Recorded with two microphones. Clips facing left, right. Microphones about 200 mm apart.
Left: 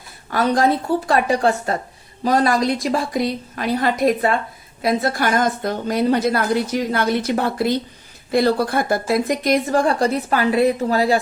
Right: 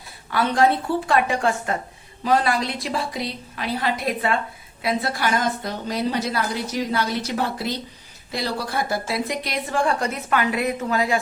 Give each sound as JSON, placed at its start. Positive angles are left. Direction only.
{"t": 0.3, "sound": "a woman's voice", "side_deg": 40}